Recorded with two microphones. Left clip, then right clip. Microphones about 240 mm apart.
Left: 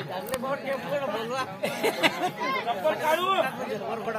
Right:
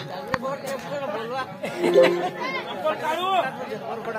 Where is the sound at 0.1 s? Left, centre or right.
Left.